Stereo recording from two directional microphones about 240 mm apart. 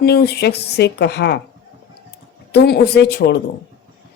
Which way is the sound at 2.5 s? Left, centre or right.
Left.